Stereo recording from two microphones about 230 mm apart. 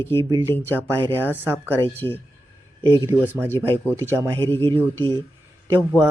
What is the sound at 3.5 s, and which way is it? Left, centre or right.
Speech, centre.